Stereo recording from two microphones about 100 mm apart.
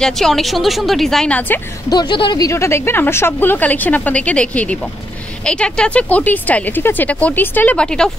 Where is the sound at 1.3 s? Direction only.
15° left (ahead or behind).